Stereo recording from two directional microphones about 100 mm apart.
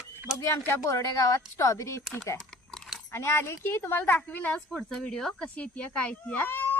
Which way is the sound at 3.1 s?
25° left (ahead or behind).